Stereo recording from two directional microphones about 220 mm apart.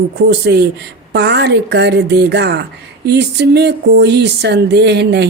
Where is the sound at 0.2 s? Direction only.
50° right (ahead or behind).